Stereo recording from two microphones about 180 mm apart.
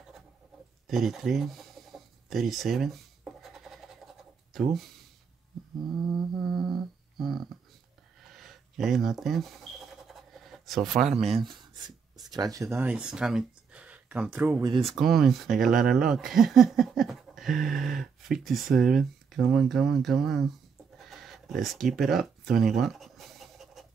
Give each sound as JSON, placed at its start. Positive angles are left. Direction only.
{"t": 0.8, "sound": "chicken", "side_deg": 0}
{"t": 4.6, "sound": "speech", "side_deg": 0}
{"t": 6.0, "sound": "humming", "side_deg": 0}
{"t": 8.2, "sound": "a sound", "side_deg": 0}
{"t": 11.1, "sound": "speech", "side_deg": -35}
{"t": 14.6, "sound": "speech", "side_deg": -25}
{"t": 14.9, "sound": "speech", "side_deg": 0}
{"t": 21.0, "sound": "a sound", "side_deg": 0}